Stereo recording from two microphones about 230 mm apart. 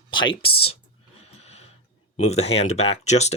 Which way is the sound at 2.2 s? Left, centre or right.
Left.